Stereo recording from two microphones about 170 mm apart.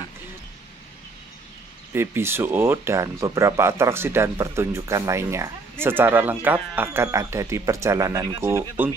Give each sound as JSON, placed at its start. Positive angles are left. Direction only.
{"t": 2.0, "sound": "speech", "side_deg": -15}